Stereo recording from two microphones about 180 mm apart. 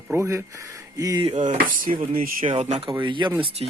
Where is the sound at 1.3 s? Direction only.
45° right (ahead or behind).